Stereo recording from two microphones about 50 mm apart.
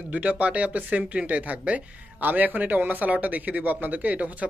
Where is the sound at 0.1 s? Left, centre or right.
Right.